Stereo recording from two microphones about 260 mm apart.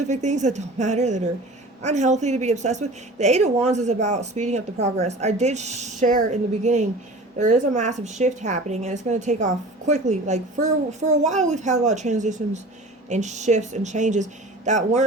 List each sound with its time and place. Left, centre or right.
0.0 s a woman's voice: right